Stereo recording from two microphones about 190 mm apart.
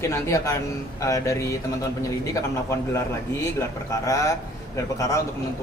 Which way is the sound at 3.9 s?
15° left (ahead or behind).